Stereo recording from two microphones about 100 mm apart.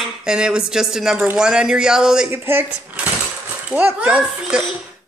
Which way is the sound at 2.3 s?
20° right (ahead or behind).